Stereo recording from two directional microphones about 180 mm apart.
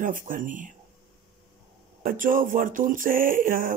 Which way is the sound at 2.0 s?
50° right (ahead or behind).